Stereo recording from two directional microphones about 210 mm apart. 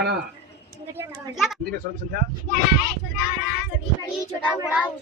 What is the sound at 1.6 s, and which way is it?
Speech, 45° right (ahead or behind).